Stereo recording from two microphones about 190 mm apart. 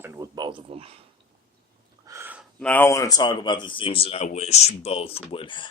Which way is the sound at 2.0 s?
15° right (ahead or behind).